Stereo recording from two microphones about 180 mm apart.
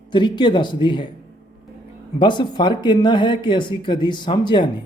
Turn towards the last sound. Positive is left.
turn(degrees=25)  # may be behind; listen again after turning